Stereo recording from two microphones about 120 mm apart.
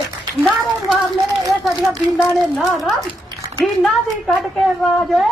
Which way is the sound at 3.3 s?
35° right (ahead or behind).